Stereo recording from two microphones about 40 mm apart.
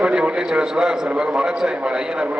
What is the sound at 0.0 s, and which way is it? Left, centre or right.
A man's voice, right.